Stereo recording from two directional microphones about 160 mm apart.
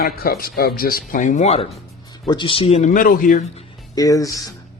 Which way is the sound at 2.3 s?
30° left (ahead or behind).